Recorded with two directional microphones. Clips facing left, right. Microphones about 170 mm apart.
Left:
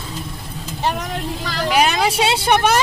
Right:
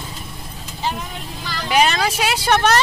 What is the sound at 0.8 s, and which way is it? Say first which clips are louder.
Vehicle: left 4 dB; 80° left.